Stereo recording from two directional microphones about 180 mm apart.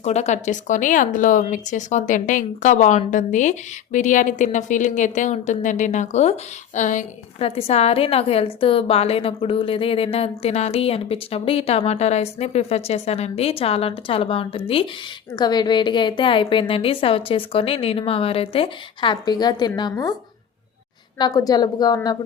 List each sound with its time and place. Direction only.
0.0 s a woman's voice: 40° left (ahead or behind); by 20.1 s 20° left (ahead or behind)
21.2 s a woman's voice: 20° left (ahead or behind)